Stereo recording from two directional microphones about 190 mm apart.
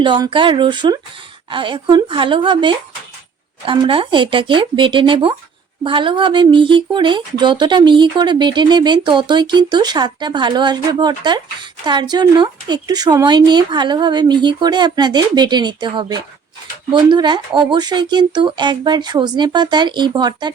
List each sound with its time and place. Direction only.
0.0 s speech: 25° right (ahead or behind)